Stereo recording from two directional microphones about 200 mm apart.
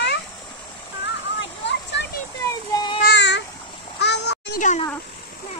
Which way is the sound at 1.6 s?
60° left (ahead or behind).